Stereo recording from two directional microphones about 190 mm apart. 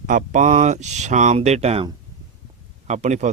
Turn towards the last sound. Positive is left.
turn(degrees=-35)  # may be behind; listen again after turning